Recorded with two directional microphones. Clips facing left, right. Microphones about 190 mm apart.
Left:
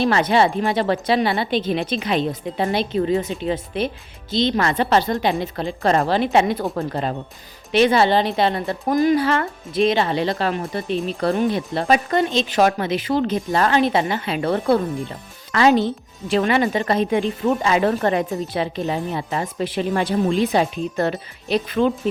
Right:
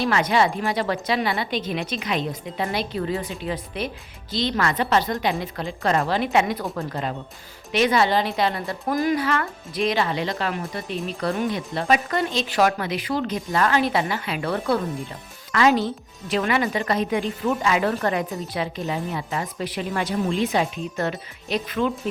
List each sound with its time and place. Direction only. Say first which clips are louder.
0.0 s a woman's voice: left 3 dB; 30° left (ahead or behind)
12.1 s a woman's voice: left 4 dB; 20° left (ahead or behind)